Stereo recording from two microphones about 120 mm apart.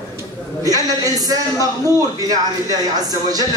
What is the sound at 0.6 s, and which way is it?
Speech, 30° right (ahead or behind).